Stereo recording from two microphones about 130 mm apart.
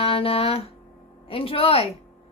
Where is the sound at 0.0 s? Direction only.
45° left (ahead or behind).